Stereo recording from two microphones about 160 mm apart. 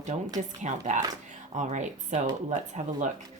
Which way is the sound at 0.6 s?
50° right (ahead or behind).